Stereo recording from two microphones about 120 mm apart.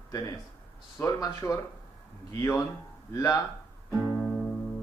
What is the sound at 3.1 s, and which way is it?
Speech, 25° left (ahead or behind).